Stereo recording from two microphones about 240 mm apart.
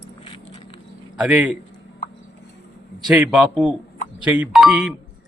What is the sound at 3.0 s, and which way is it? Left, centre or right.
A man's voice, centre.